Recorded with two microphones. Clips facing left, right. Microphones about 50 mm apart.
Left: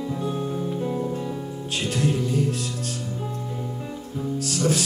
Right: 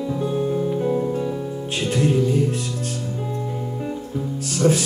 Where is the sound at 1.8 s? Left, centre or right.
Right.